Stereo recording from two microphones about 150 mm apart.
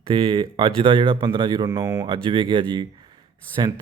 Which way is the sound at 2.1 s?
35° right (ahead or behind).